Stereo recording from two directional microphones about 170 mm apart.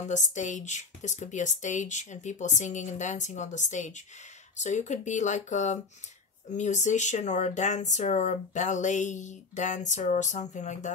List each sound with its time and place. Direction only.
0.1 s speech: 45° left (ahead or behind)